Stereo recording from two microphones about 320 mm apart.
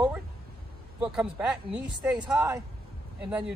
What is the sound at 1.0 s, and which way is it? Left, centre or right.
Speech, centre.